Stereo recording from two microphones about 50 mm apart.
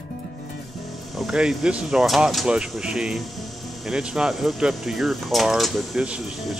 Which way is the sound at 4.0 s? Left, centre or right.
Centre.